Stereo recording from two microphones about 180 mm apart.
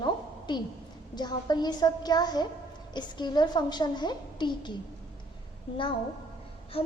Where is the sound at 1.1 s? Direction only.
25° left (ahead or behind).